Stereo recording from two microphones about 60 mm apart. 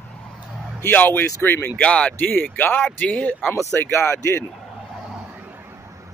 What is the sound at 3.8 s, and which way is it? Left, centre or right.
Speech, left.